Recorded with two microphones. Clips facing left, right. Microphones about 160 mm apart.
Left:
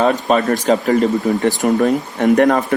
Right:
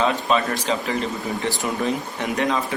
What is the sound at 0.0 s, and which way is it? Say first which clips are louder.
Speech: left 6 dB; 45° left (ahead or behind).